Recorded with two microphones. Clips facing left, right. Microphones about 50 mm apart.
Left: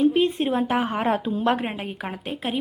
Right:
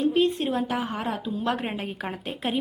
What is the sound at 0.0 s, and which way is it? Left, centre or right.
A woman's voice, centre.